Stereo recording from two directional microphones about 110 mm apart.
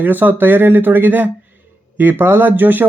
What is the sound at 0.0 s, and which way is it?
Speech, 15° right (ahead or behind).